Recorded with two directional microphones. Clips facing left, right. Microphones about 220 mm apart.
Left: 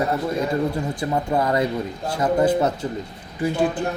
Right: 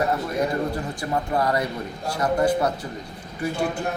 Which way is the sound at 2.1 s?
20° left (ahead or behind).